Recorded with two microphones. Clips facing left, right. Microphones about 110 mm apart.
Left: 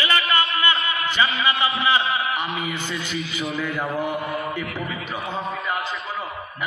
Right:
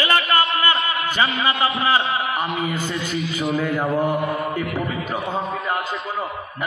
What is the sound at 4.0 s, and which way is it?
Speech, 45° right (ahead or behind).